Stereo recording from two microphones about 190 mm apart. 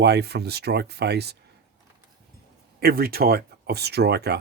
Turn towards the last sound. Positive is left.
turn(degrees=-60)  # may be behind; listen again after turning